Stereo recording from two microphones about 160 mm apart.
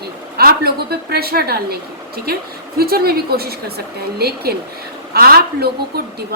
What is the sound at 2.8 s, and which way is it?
A woman's voice, 70° right (ahead or behind).